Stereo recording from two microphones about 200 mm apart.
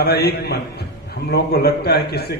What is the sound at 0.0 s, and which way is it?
A man's voice, 50° left (ahead or behind).